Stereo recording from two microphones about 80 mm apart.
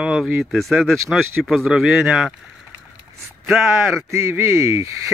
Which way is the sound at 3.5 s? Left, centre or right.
Centre.